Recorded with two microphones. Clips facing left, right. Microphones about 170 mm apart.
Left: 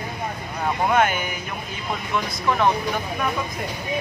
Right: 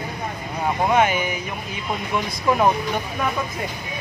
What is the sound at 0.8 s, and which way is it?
Speech, 5° right (ahead or behind).